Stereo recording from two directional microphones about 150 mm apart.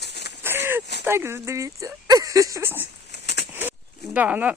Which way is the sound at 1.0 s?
15° right (ahead or behind).